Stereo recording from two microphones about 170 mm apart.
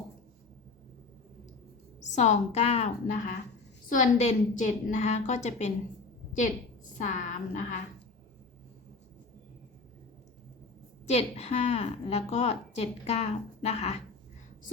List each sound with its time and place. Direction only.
2.1 s a woman's voice: 45° left (ahead or behind)
7.0 s a woman's voice: 45° left (ahead or behind)
11.1 s a woman's voice: 40° left (ahead or behind)